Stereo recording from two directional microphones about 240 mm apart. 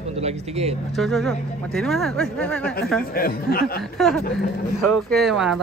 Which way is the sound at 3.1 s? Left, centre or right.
Left.